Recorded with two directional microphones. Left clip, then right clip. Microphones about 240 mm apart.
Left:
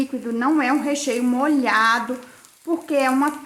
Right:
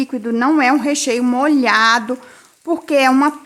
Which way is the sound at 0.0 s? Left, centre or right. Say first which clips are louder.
Right 5 dB; right.